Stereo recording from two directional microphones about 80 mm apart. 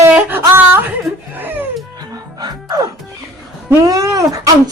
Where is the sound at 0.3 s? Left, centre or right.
Right.